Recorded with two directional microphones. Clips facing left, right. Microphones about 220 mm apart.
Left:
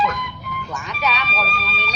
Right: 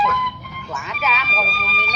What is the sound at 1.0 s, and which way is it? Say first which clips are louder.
Speech: left 1 dB; centre (ahead or behind).